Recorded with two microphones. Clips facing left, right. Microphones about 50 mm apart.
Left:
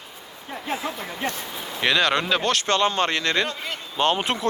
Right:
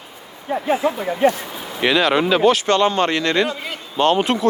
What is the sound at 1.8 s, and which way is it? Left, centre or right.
Speech, centre.